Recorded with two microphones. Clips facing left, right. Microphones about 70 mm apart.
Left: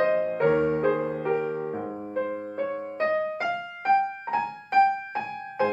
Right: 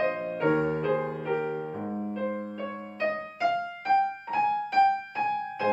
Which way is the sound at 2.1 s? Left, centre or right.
Left.